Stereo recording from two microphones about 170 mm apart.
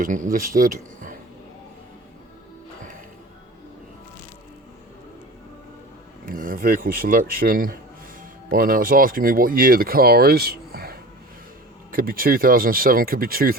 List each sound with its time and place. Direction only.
0.0 s speech: 50° right (ahead or behind)
6.2 s speech: 55° right (ahead or behind)